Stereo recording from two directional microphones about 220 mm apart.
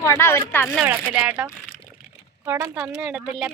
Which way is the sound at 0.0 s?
10° left (ahead or behind).